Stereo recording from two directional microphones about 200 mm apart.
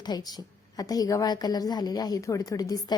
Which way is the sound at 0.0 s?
20° left (ahead or behind).